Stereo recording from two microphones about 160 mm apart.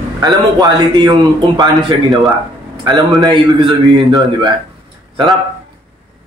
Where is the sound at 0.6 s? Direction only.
25° right (ahead or behind).